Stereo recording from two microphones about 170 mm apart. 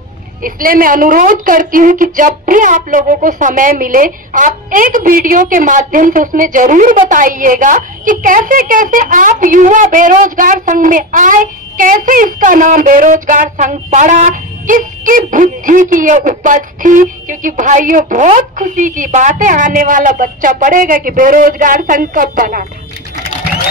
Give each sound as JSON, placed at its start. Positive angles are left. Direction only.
{"t": 0.4, "sound": "a woman's voice", "side_deg": -55}